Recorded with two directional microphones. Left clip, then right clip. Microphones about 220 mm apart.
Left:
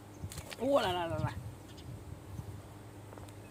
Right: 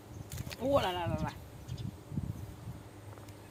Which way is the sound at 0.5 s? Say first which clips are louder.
Even; 10° left (ahead or behind).